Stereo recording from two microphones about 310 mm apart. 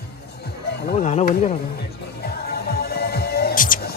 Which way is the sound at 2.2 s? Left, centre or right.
Left.